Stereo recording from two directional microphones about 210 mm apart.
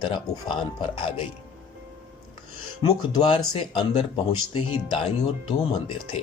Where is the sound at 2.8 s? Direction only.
20° left (ahead or behind).